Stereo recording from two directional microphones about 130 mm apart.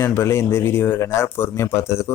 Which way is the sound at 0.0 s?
20° left (ahead or behind).